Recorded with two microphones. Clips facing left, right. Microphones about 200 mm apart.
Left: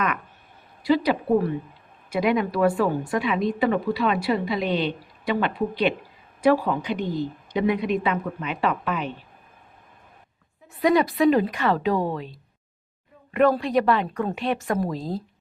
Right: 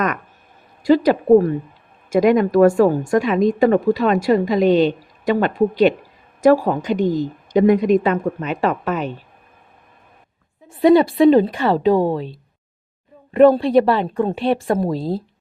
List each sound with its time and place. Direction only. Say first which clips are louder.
0.8 s a woman's voice: right 7 dB; 45° right (ahead or behind)
10.7 s a woman's voice: right 7 dB; 30° right (ahead or behind)